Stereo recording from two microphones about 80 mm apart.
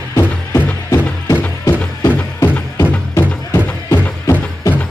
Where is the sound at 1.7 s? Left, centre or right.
Left.